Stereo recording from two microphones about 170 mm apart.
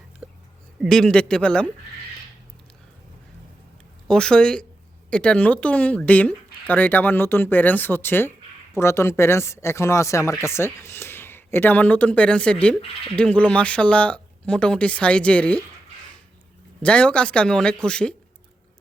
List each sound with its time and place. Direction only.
0.2 s a sound: 5° right (ahead or behind)
0.8 s speech: centre (ahead or behind)
4.1 s speech: 5° left (ahead or behind)
16.8 s speech: 5° left (ahead or behind)